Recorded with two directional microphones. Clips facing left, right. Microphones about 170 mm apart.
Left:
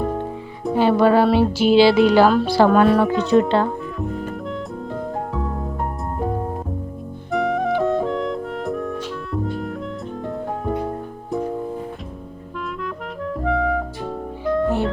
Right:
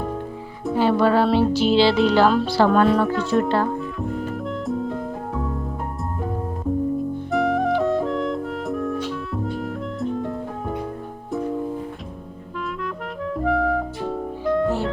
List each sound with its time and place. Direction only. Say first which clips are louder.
0.8 s speech: left 3 dB; 15° left (ahead or behind)
4.1 s music: right 1 dB; centre (ahead or behind)
7.3 s clarinet: left 1 dB; centre (ahead or behind)
13.4 s music: even; centre (ahead or behind)